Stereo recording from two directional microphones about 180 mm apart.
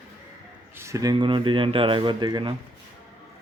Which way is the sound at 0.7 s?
15° right (ahead or behind).